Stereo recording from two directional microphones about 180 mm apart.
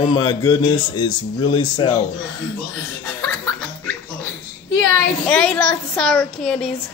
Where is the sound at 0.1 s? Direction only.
25° left (ahead or behind).